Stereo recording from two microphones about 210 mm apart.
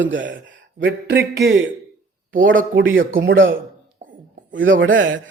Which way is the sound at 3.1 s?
65° right (ahead or behind).